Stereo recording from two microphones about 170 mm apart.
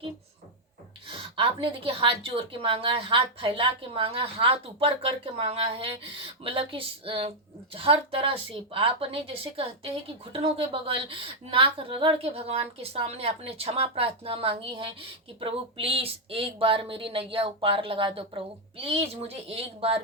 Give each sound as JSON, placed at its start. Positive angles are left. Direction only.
{"t": 1.0, "sound": "a woman's voice", "side_deg": -30}